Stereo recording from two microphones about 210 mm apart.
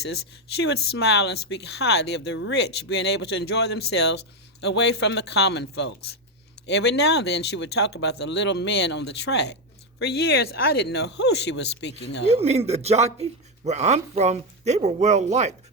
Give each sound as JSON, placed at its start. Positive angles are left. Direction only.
{"t": 0.0, "sound": "speech", "side_deg": 50}
{"t": 12.3, "sound": "speech", "side_deg": -30}